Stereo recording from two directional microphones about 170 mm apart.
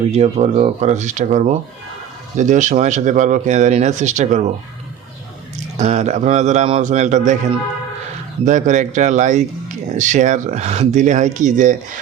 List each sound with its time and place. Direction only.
0.1 s speech: 40° right (ahead or behind)
5.7 s speech: 40° right (ahead or behind)
8.4 s speech: 45° right (ahead or behind)